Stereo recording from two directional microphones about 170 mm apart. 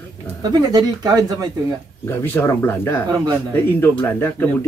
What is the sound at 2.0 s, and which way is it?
Speech, 15° left (ahead or behind).